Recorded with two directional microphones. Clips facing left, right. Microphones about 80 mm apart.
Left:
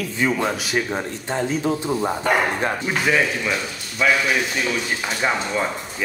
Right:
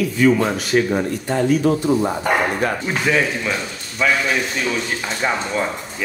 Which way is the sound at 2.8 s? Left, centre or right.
Centre.